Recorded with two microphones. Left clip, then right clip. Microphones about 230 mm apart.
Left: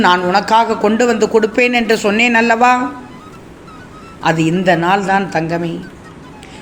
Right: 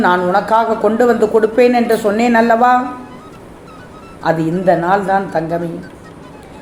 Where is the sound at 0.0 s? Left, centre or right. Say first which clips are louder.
Left 1 dB; left.